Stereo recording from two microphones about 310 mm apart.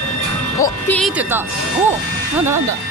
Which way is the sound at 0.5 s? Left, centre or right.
Centre.